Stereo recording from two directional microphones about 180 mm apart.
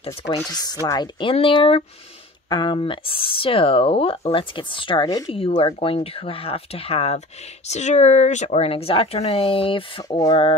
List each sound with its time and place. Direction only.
0.0 s speech: 30° left (ahead or behind)
0.5 s speech: 20° left (ahead or behind)